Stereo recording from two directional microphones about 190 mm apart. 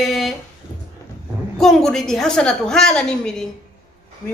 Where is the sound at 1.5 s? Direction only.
Centre (ahead or behind).